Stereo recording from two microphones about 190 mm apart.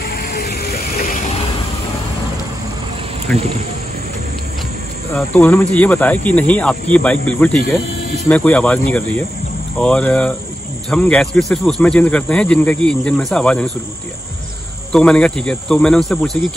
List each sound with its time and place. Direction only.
0.1 s vehicle: 55° left (ahead or behind)
5.1 s speech: 10° left (ahead or behind)
14.9 s speech: 5° left (ahead or behind)